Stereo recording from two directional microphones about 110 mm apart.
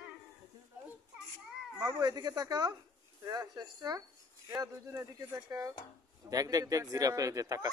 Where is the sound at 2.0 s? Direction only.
35° right (ahead or behind).